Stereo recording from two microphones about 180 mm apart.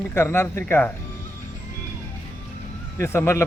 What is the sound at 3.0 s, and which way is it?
Speech, 15° left (ahead or behind).